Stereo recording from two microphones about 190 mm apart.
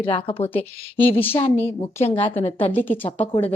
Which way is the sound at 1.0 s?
10° left (ahead or behind).